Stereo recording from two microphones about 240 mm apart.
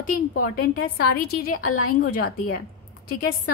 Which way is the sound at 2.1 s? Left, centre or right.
Left.